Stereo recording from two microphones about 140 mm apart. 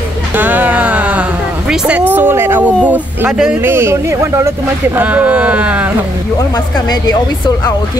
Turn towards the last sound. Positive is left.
turn(degrees=30)  # may be behind; listen again after turning